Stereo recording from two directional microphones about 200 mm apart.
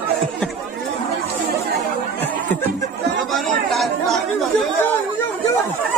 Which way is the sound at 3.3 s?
Centre (ahead or behind).